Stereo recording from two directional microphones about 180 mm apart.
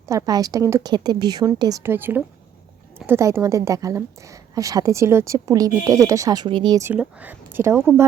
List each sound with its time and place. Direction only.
0.1 s a woman's voice: 20° right (ahead or behind)